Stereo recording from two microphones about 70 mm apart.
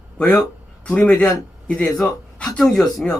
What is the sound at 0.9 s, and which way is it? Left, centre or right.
Speech, centre.